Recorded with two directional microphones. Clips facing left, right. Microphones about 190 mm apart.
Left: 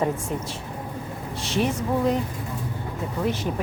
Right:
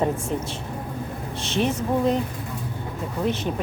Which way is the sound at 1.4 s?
25° right (ahead or behind).